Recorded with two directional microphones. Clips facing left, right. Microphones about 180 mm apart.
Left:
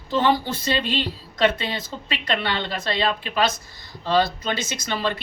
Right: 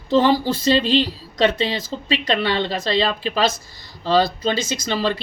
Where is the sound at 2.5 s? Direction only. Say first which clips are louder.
Right 5 dB; 25° right (ahead or behind).